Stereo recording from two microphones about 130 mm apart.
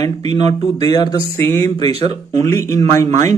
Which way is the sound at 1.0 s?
30° left (ahead or behind).